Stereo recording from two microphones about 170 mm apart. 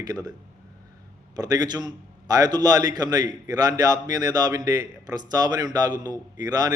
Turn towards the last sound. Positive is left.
turn(degrees=-20)  # may be behind; listen again after turning